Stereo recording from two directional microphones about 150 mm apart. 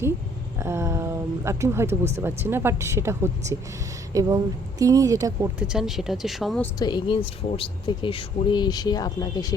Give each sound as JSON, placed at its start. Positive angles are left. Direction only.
{"t": 0.6, "sound": "a woman's voice", "side_deg": -20}
{"t": 5.5, "sound": "speech", "side_deg": -5}
{"t": 6.7, "sound": "speech", "side_deg": 30}